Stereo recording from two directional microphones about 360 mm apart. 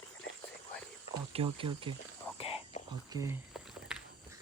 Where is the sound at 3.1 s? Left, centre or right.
Centre.